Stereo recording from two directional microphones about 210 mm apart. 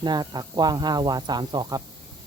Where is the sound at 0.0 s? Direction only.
20° right (ahead or behind).